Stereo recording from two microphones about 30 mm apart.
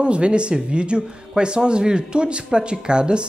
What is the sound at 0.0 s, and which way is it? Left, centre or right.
Speech, right.